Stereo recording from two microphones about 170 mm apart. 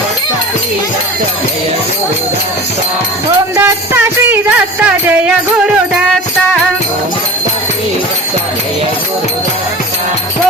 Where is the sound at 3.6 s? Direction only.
15° right (ahead or behind).